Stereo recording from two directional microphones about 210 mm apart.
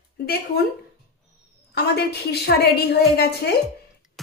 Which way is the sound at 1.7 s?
50° left (ahead or behind).